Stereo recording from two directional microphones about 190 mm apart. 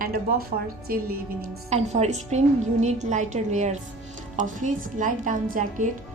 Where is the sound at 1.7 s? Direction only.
35° right (ahead or behind).